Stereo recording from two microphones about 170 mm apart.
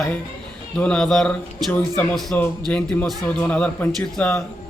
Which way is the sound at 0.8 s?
5° left (ahead or behind).